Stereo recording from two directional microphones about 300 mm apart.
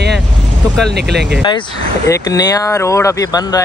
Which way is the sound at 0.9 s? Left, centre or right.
Right.